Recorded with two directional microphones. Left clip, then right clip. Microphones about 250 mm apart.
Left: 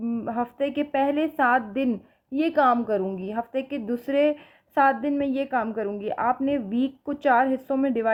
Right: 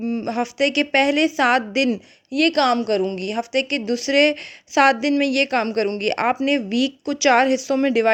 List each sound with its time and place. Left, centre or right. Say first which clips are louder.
0.1 s a woman's voice: right 4 dB; right